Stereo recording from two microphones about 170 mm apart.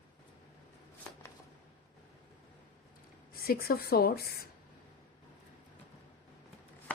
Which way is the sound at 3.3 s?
60° left (ahead or behind).